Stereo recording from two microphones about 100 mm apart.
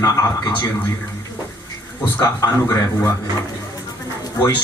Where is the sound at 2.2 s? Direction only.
40° left (ahead or behind).